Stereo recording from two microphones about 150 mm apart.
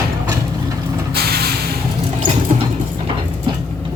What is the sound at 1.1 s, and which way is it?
Vehicle, 90° right.